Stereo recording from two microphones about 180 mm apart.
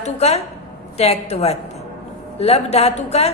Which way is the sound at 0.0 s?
35° left (ahead or behind).